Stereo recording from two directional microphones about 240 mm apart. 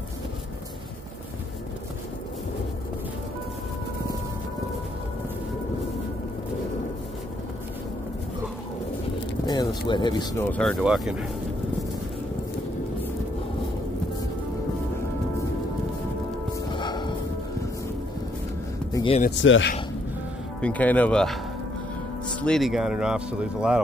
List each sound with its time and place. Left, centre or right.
9.5 s speech: centre
10.5 s speech: centre
16.7 s music: centre
18.9 s a sound: centre
19.4 s speech: left
20.6 s speech: centre
22.4 s speech: centre